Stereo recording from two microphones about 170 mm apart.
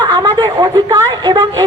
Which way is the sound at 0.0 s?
25° right (ahead or behind).